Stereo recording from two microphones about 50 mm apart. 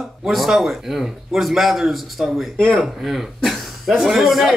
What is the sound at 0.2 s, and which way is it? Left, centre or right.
A man's voice, centre.